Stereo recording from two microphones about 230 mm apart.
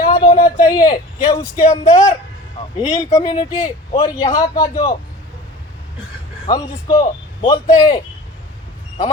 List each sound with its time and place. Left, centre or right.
0.1 s a sound: centre
0.6 s speech: centre
6.5 s speech: centre